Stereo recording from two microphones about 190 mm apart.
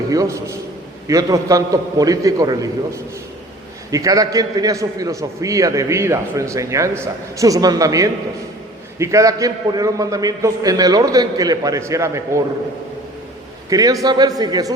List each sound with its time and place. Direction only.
0.1 s a man's voice: 15° right (ahead or behind)
13.7 s a man's voice: 20° right (ahead or behind)